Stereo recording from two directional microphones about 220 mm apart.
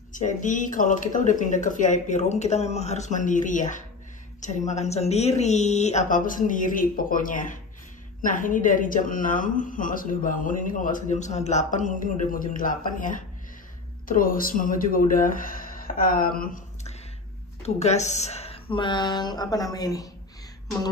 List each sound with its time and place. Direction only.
0.1 s a woman's voice: 35° left (ahead or behind); by 20.1 s 15° left (ahead or behind)